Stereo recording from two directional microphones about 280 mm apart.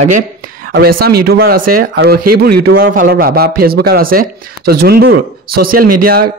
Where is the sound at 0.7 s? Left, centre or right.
Right.